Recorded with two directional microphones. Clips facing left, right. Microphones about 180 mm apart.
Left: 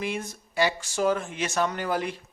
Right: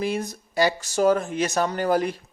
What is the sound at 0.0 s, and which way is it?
Speech, 35° right (ahead or behind).